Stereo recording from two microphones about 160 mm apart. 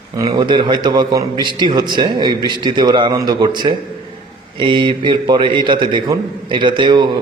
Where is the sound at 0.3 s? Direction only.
30° right (ahead or behind).